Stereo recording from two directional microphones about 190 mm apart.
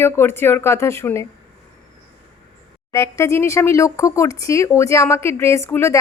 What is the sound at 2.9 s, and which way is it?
Speech, 15° left (ahead or behind).